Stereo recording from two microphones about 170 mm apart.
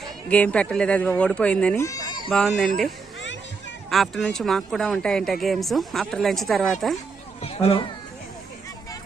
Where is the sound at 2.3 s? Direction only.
5° left (ahead or behind).